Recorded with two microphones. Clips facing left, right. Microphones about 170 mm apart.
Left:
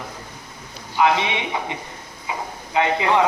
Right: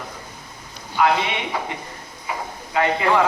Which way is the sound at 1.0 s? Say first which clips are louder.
Even; 20° left (ahead or behind).